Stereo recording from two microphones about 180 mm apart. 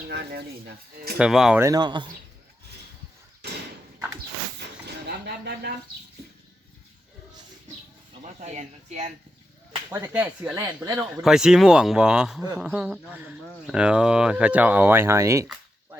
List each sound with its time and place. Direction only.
0.1 s speech: 65° right (ahead or behind)
1.2 s speech: 5° right (ahead or behind)
1.6 s speech: 20° right (ahead or behind)
4.9 s a sound: 65° right (ahead or behind)
8.2 s speech: 40° right (ahead or behind)
9.9 s speech: 10° right (ahead or behind)
11.1 s speech: 5° right (ahead or behind)